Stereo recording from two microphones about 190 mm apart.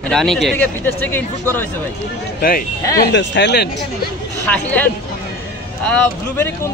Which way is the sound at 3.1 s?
65° left (ahead or behind).